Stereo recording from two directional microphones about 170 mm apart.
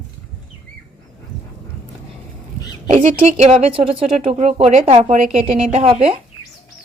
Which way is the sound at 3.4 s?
35° right (ahead or behind).